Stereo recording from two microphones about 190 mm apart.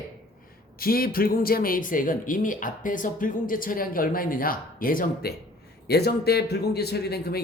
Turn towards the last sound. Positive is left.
turn(degrees=55)  # may be behind; listen again after turning